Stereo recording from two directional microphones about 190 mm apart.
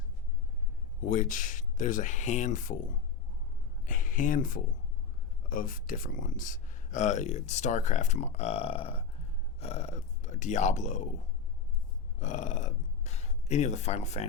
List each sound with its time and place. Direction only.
1.0 s speech: 45° left (ahead or behind)
3.8 s speech: 45° left (ahead or behind)
12.2 s speech: 40° left (ahead or behind)